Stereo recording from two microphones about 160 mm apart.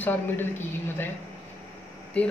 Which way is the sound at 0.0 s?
10° left (ahead or behind).